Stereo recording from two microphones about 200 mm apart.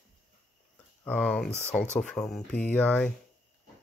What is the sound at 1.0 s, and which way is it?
Speech, 5° left (ahead or behind).